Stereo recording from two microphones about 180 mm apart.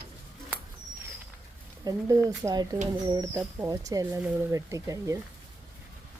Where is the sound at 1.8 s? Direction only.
20° right (ahead or behind).